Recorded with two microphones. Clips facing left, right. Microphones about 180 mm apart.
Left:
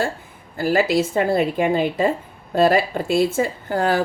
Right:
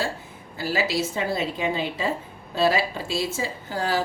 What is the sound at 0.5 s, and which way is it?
A woman's voice, 50° left (ahead or behind).